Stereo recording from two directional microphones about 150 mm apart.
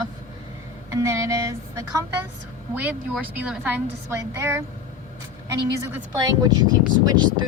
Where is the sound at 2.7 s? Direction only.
10° right (ahead or behind).